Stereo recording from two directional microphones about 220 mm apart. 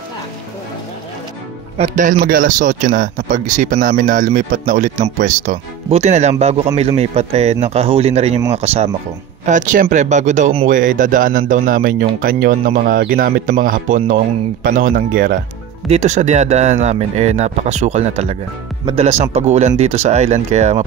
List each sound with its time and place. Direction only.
1.8 s speech: 35° right (ahead or behind)